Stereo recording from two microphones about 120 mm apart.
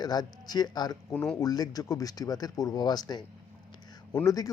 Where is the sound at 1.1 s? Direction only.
5° left (ahead or behind).